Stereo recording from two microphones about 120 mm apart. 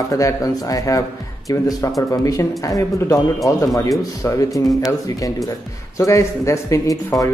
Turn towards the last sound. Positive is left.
turn(degrees=25)  # may be behind; listen again after turning